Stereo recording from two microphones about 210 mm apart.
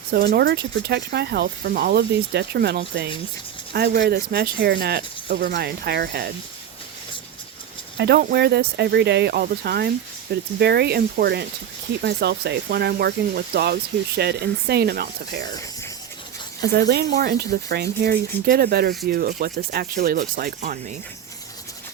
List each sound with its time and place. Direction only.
0.1 s speech: 50° right (ahead or behind)
7.9 s speech: 50° right (ahead or behind)
16.6 s speech: 50° right (ahead or behind)